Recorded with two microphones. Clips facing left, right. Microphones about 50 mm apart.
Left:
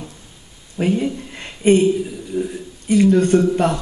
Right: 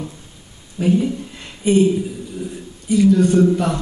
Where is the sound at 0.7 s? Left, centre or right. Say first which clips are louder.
Right 2 dB; left.